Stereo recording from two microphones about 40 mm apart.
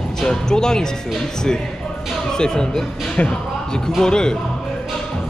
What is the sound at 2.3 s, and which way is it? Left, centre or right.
Speech, centre.